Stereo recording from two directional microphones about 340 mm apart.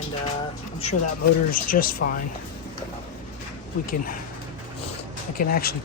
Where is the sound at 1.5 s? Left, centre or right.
Left.